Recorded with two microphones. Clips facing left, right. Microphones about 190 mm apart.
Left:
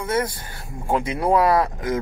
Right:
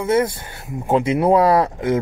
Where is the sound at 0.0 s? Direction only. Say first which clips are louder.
Right 6 dB; 25° right (ahead or behind).